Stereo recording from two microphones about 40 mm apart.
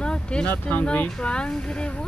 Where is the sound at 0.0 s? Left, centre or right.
Left.